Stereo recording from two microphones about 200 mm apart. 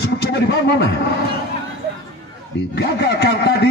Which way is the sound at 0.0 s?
60° left (ahead or behind).